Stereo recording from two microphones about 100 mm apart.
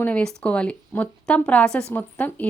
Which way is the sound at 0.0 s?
10° left (ahead or behind).